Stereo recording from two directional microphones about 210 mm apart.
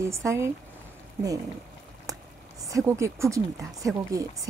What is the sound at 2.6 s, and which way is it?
A woman's voice, 15° right (ahead or behind).